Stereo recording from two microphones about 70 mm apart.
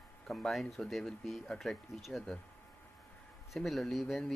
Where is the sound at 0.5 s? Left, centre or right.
Centre.